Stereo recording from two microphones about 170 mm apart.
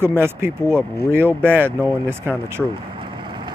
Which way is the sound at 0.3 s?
15° right (ahead or behind).